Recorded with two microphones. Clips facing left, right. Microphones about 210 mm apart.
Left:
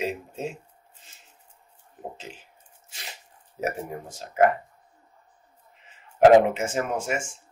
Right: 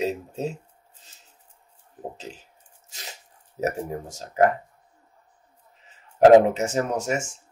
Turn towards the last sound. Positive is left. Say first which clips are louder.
# right 2 dB
turn(degrees=-40)  # may be behind; listen again after turning